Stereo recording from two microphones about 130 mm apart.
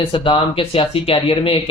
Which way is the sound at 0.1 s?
45° left (ahead or behind).